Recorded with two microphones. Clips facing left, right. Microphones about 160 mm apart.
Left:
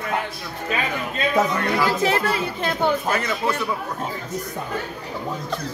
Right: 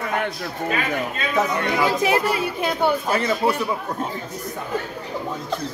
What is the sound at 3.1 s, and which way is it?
Speech, 30° right (ahead or behind).